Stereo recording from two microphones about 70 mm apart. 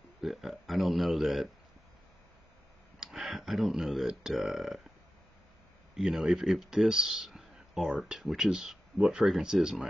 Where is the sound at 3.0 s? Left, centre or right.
Centre.